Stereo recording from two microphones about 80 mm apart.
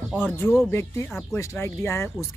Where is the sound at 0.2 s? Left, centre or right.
Left.